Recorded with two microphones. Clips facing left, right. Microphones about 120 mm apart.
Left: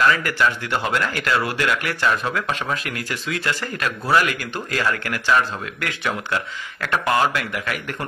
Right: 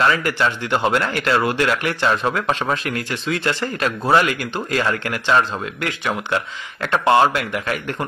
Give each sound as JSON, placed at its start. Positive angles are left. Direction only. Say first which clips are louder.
{"t": 0.0, "sound": "speech", "louder": "right 1 dB", "side_deg": -25}